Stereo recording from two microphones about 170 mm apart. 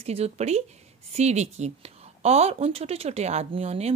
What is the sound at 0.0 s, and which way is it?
A woman's voice, 40° right (ahead or behind).